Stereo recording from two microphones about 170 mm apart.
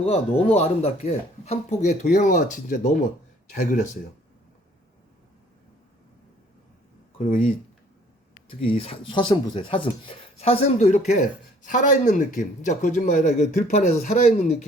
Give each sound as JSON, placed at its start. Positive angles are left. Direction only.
{"t": 0.0, "sound": "speech", "side_deg": 40}
{"t": 7.2, "sound": "speech", "side_deg": 45}
{"t": 8.4, "sound": "speech", "side_deg": 35}